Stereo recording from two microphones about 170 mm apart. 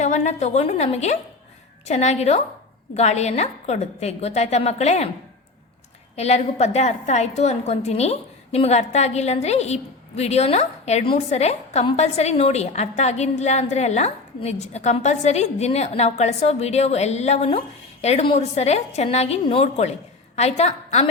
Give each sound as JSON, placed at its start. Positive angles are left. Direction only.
{"t": 0.0, "sound": "a woman's voice", "side_deg": 45}
{"t": 6.1, "sound": "a woman's voice", "side_deg": 40}